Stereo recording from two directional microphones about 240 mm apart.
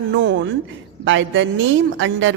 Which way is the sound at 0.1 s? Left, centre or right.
Right.